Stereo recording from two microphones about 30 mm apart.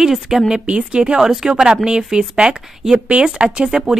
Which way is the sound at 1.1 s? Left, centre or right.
Centre.